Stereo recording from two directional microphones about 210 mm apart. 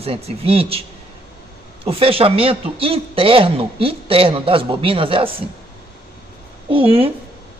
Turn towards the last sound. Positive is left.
turn(degrees=-25)  # may be behind; listen again after turning